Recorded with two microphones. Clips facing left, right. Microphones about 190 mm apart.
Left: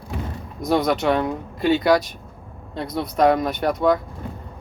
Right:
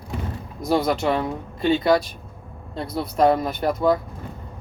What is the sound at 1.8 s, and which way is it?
Speech, 25° right (ahead or behind).